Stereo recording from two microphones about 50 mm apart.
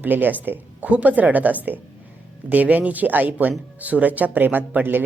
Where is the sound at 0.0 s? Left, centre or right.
Right.